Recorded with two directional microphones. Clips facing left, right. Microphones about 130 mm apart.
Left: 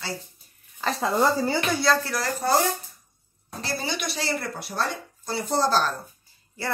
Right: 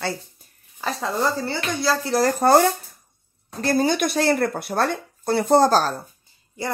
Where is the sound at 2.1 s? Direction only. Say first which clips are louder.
Right 7 dB; 45° right (ahead or behind).